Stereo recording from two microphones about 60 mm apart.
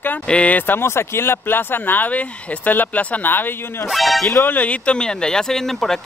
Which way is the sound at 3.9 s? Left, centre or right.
Centre.